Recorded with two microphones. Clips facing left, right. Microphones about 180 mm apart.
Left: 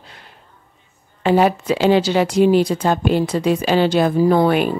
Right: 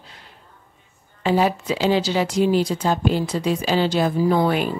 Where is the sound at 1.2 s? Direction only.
60° left (ahead or behind).